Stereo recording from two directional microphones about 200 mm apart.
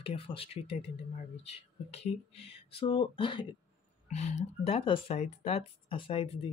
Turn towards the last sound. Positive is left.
turn(degrees=30)  # may be behind; listen again after turning